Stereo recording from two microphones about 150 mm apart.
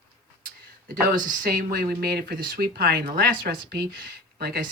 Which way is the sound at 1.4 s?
80° right.